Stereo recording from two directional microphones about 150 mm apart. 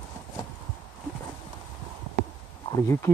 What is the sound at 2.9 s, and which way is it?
Speech, 15° left (ahead or behind).